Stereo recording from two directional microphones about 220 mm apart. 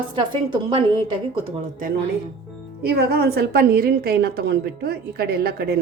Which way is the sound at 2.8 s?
45° right (ahead or behind).